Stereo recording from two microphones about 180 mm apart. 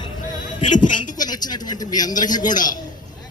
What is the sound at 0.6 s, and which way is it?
Speech, 45° left (ahead or behind).